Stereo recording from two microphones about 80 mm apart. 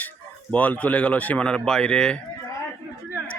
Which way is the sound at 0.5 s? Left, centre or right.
Left.